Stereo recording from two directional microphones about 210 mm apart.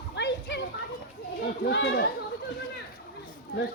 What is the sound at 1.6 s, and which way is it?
Speech, 55° left (ahead or behind).